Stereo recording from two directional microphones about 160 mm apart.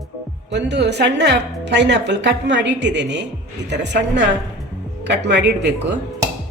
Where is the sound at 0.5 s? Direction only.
90° right.